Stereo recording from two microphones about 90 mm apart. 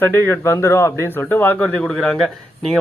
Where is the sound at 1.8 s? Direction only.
5° left (ahead or behind).